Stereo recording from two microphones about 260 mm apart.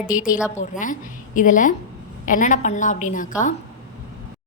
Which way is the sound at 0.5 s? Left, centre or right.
Left.